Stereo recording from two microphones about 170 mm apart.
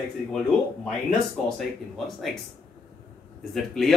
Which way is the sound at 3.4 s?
Centre (ahead or behind).